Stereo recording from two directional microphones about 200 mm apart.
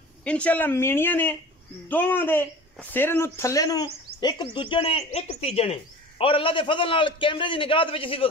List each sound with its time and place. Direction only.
0.2 s speech: 5° left (ahead or behind); by 8.3 s 25° left (ahead or behind)